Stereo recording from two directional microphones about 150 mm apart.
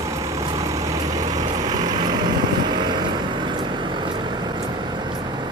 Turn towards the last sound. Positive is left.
turn(degrees=-30)  # may be behind; listen again after turning